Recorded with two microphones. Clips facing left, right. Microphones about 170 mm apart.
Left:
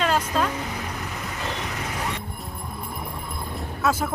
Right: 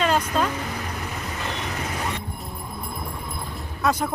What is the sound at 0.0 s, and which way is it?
Vehicle, centre (ahead or behind).